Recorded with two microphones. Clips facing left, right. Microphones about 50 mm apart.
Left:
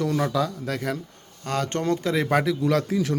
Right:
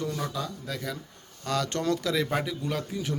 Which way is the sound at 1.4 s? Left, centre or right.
Left.